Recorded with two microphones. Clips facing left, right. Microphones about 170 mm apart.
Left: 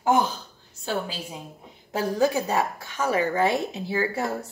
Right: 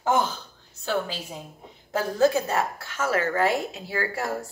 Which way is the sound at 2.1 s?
15° left (ahead or behind).